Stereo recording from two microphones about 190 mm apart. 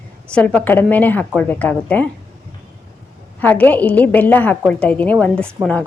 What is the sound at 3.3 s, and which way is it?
A woman's voice, 10° left (ahead or behind).